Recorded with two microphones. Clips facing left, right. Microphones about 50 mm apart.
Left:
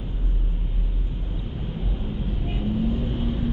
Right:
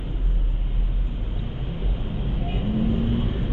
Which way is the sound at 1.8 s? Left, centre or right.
Centre.